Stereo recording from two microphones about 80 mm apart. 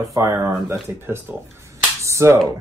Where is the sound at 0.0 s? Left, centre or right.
Right.